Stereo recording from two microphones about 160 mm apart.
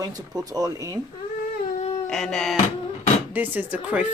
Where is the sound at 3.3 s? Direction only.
10° right (ahead or behind).